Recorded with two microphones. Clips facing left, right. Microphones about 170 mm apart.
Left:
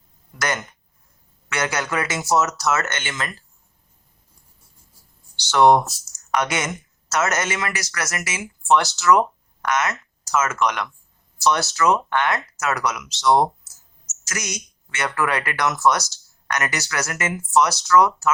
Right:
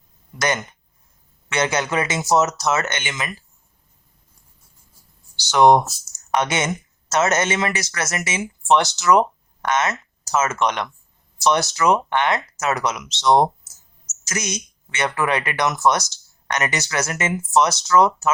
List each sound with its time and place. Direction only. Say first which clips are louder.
0.3 s speech: right 3 dB; 20° right (ahead or behind)
5.4 s speech: right 1 dB; 15° right (ahead or behind)